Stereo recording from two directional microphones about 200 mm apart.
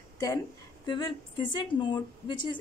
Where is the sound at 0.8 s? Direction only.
20° left (ahead or behind).